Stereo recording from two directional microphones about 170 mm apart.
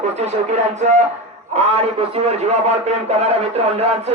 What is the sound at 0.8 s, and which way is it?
A man's voice, 45° right (ahead or behind).